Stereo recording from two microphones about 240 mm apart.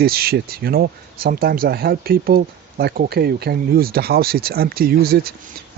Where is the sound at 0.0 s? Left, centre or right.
Right.